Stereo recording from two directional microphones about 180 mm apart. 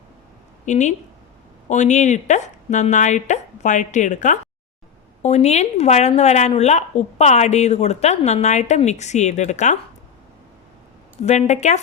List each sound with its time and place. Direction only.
0.6 s a woman's voice: 40° left (ahead or behind)
11.2 s speech: 40° left (ahead or behind)